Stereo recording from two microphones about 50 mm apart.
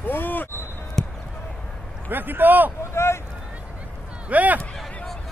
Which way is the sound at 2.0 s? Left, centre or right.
Right.